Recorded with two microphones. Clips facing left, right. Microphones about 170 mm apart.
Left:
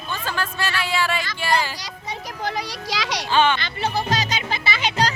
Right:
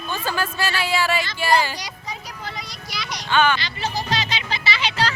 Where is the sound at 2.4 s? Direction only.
75° left (ahead or behind).